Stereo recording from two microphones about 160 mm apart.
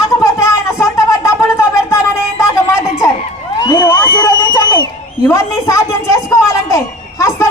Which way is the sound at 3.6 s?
25° left (ahead or behind).